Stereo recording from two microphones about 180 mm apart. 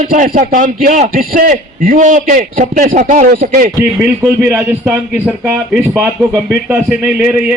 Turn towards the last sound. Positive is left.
turn(degrees=-10)  # may be behind; listen again after turning